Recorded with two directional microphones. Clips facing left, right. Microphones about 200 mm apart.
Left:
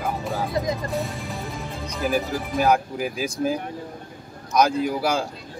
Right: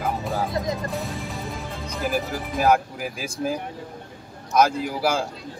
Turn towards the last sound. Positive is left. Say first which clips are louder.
# left 1 dB
turn(degrees=-5)  # may be behind; listen again after turning